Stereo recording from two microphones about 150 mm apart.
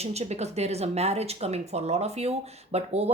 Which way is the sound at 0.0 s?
45° right (ahead or behind).